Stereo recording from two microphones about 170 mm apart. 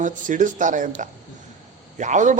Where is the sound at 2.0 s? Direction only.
45° right (ahead or behind).